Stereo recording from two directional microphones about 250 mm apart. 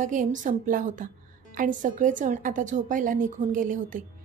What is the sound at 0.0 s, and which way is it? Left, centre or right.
A woman's voice, right.